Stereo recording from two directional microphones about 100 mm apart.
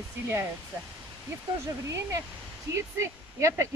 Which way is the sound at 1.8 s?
30° right (ahead or behind).